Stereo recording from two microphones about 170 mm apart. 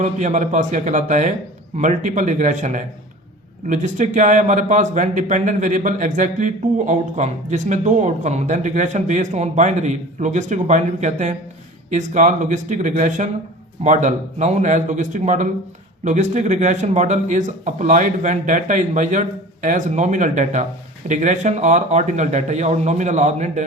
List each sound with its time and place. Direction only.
0.0 s speech: 45° right (ahead or behind)